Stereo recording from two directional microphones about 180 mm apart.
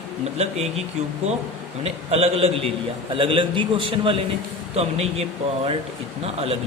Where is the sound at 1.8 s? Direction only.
35° right (ahead or behind).